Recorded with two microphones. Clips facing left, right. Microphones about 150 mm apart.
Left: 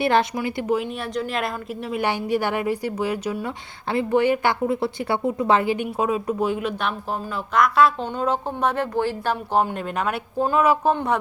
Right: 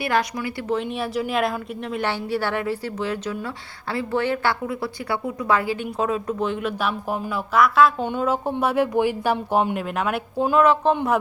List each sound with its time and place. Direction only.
0.0 s speech: 25° left (ahead or behind)
0.7 s a woman's voice: centre (ahead or behind)